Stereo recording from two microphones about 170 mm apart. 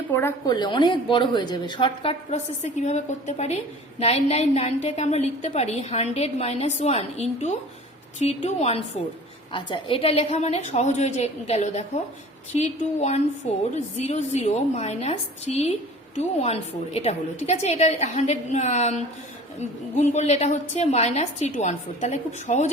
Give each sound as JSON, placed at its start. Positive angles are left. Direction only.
{"t": 0.1, "sound": "a woman's voice", "side_deg": 15}
{"t": 0.5, "sound": "a woman's voice", "side_deg": 25}